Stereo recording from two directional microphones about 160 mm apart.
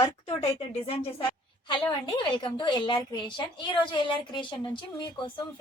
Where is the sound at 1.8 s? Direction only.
25° left (ahead or behind).